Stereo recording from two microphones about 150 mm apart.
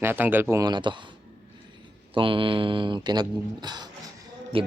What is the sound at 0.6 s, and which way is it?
Speech, 30° right (ahead or behind).